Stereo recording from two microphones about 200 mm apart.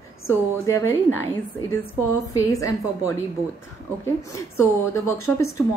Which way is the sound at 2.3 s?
15° left (ahead or behind).